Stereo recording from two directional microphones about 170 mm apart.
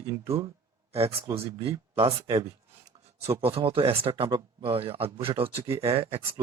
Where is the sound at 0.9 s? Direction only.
35° right (ahead or behind).